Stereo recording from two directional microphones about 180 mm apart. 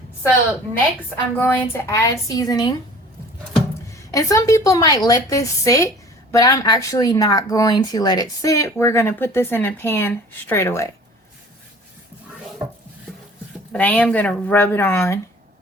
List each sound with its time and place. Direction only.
0.7 s a woman's voice: 10° left (ahead or behind)
4.1 s speech: 15° left (ahead or behind)
13.7 s speech: 10° left (ahead or behind)